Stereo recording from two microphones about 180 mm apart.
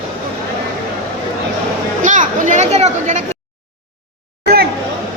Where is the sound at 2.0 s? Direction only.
45° right (ahead or behind).